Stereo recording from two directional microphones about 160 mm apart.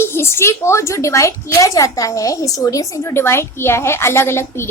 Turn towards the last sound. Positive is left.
turn(degrees=15)  # may be behind; listen again after turning